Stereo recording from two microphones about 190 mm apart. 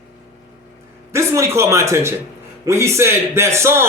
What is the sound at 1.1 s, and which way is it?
A man's voice, 15° right (ahead or behind).